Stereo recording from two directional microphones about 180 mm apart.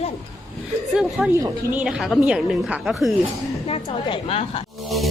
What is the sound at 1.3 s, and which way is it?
Speech, 15° right (ahead or behind).